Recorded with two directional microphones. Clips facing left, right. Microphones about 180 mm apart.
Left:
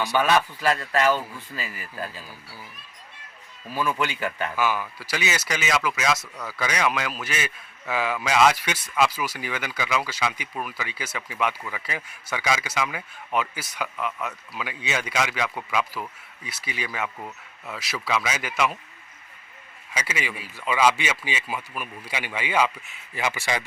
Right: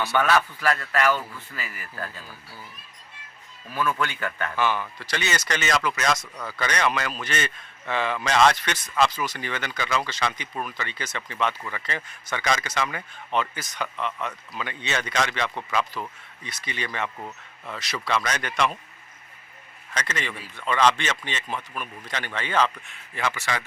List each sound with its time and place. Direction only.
0.0 s speech: 15° left (ahead or behind)
3.8 s speech: 15° left (ahead or behind)
19.9 s speech: 10° left (ahead or behind)